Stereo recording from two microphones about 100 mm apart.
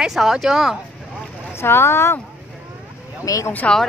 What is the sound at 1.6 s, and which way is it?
Speech, 25° left (ahead or behind).